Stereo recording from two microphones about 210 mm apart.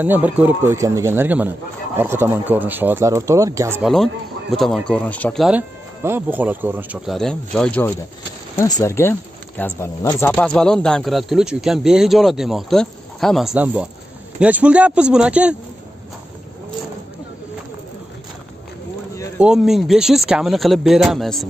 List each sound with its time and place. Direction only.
0.0 s speech: 10° right (ahead or behind)
3.8 s speech: centre (ahead or behind)
8.5 s speech: 15° left (ahead or behind); by 15.5 s 5° right (ahead or behind)
19.4 s speech: 5° right (ahead or behind)